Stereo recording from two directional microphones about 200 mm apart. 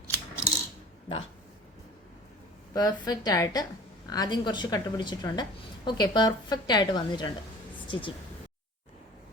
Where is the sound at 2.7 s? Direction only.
20° left (ahead or behind).